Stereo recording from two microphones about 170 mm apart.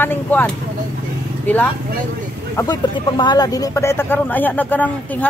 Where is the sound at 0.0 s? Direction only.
10° left (ahead or behind).